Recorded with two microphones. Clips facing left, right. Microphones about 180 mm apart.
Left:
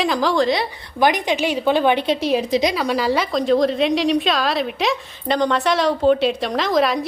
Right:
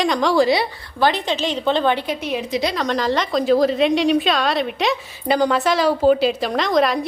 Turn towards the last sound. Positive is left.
turn(degrees=0)  # may be behind; listen again after turning